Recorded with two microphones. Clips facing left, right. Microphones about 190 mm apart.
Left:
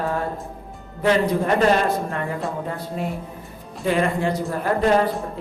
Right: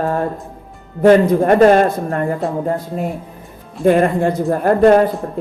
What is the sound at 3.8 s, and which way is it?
A woman's voice, 50° right (ahead or behind).